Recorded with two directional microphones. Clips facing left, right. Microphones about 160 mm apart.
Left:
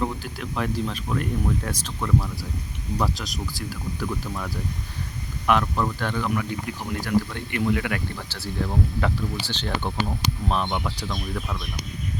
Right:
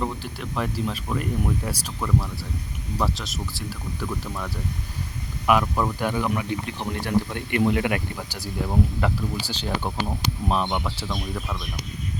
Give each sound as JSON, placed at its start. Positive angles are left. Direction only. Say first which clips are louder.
{"t": 0.0, "sound": "speech", "louder": "left 1 dB", "side_deg": 0}
{"t": 5.5, "sound": "speech", "louder": "right 1 dB", "side_deg": -10}